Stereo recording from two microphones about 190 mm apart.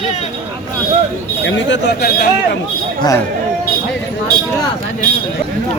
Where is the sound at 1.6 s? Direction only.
70° left (ahead or behind).